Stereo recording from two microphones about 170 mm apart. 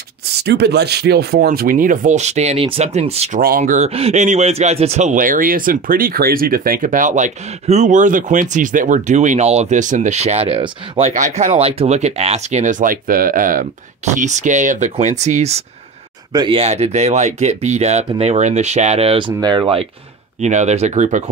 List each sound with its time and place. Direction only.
0.4 s a man's voice: 75° right (ahead or behind); by 3.3 s 40° right (ahead or behind)
3.3 s a man's voice: 55° right (ahead or behind); by 19.9 s 30° right (ahead or behind)
20.3 s a man's voice: 45° right (ahead or behind)